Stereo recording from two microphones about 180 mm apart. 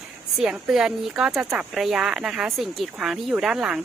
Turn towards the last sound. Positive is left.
turn(degrees=-5)  # may be behind; listen again after turning